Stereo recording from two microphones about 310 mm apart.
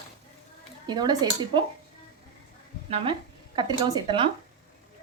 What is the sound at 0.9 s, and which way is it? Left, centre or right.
Speech, centre.